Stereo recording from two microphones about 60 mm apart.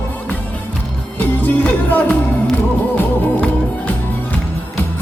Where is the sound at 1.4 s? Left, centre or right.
Left.